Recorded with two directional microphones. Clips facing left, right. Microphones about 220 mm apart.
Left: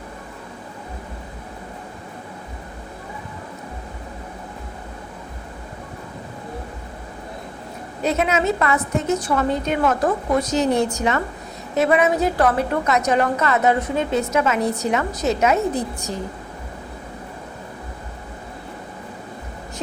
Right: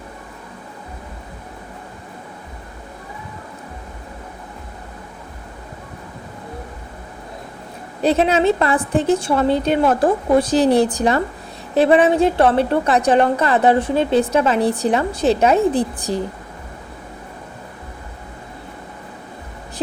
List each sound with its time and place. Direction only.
8.0 s a woman's voice: 30° right (ahead or behind)